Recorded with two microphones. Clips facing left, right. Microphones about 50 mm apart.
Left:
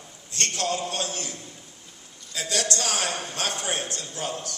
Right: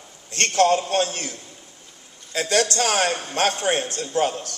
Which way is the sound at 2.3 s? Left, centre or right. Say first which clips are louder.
Right 7 dB; right.